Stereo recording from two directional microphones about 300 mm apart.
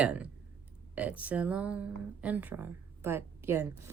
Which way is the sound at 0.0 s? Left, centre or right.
Centre.